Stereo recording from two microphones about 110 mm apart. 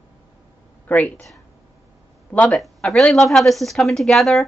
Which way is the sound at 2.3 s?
15° left (ahead or behind).